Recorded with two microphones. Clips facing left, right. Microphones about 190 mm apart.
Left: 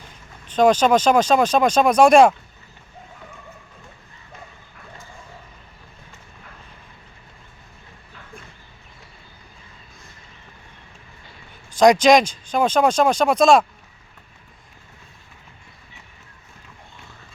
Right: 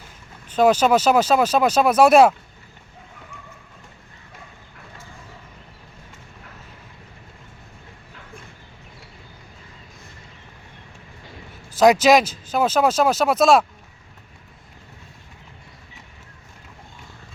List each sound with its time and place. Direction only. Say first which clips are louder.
0.4 s speech: left 1 dB; 10° right (ahead or behind)
11.8 s speech: left 1 dB; 5° right (ahead or behind)